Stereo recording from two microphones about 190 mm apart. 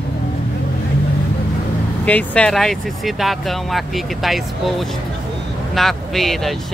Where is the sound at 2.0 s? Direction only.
5° left (ahead or behind).